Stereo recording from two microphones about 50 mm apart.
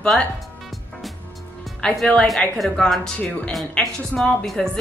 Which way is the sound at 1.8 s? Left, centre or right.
Centre.